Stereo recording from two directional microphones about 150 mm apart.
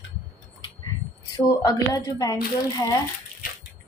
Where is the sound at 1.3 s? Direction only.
25° left (ahead or behind).